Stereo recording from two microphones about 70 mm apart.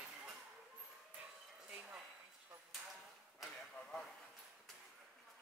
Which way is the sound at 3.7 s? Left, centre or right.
Centre.